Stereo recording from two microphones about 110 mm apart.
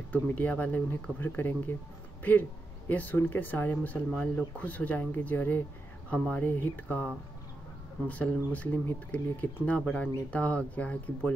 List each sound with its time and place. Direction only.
0.1 s speech: 15° left (ahead or behind)
2.9 s speech: 15° left (ahead or behind)
8.1 s speech: 10° left (ahead or behind)